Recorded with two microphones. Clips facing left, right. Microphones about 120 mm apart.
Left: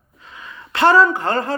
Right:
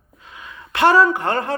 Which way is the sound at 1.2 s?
15° right (ahead or behind).